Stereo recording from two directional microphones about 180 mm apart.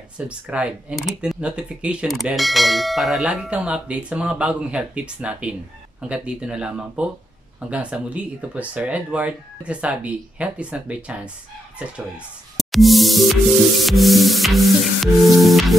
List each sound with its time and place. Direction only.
0.5 s speech: 5° right (ahead or behind)
12.5 s music: centre (ahead or behind)
15.2 s speech: centre (ahead or behind)